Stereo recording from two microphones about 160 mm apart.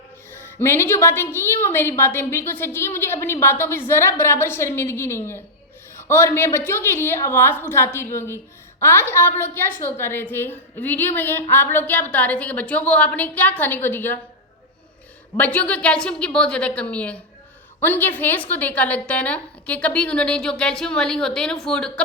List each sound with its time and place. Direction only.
0.3 s a woman's voice: 15° left (ahead or behind)
15.4 s a woman's voice: 10° left (ahead or behind)